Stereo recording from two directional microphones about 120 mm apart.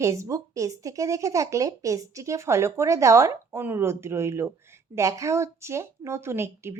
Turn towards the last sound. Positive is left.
turn(degrees=-20)  # may be behind; listen again after turning